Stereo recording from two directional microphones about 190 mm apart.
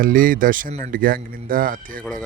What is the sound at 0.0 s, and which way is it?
Speech, 45° right (ahead or behind).